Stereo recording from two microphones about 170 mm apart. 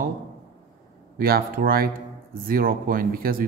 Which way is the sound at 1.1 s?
60° right (ahead or behind).